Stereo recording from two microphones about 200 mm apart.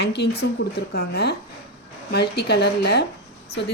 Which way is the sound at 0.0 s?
55° left (ahead or behind).